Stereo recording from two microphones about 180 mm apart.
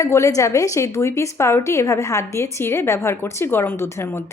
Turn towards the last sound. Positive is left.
turn(degrees=15)  # may be behind; listen again after turning